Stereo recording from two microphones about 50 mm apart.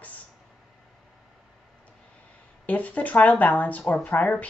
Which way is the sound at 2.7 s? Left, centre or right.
Left.